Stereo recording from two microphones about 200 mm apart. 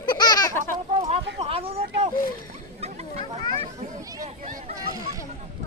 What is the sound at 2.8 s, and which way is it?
Chatter, 30° right (ahead or behind).